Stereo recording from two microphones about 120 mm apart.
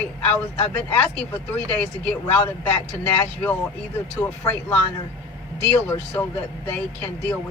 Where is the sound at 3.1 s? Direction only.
15° left (ahead or behind).